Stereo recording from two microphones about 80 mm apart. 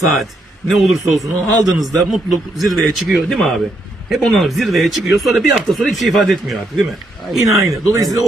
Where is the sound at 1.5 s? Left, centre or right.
Right.